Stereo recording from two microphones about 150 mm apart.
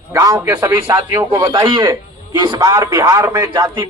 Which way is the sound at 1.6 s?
30° right (ahead or behind).